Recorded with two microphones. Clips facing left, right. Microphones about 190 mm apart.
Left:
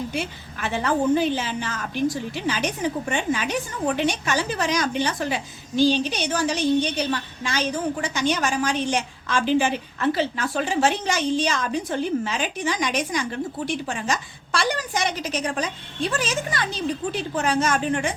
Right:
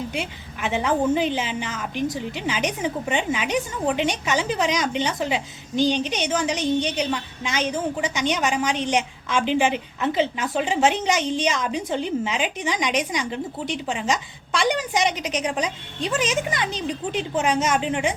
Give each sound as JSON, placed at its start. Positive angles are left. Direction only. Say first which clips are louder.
{"t": 0.1, "sound": "a woman's voice", "louder": "left 1 dB", "side_deg": -15}